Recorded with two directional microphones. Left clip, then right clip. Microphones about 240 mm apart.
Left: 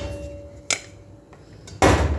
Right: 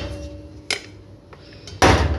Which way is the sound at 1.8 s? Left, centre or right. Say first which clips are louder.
Right 2 dB; centre.